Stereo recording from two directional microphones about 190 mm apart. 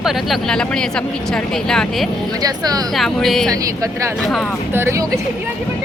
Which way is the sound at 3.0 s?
Centre (ahead or behind).